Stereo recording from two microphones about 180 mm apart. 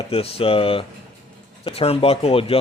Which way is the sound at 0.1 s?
30° left (ahead or behind).